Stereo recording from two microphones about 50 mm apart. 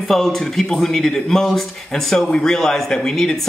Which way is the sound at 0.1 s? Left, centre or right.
Centre.